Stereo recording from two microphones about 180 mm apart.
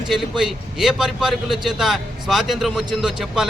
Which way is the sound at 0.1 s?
Centre (ahead or behind).